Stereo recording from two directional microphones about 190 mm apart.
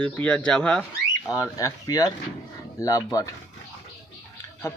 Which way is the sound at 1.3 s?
20° left (ahead or behind).